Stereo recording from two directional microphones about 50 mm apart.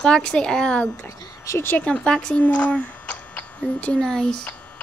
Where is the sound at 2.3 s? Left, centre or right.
Left.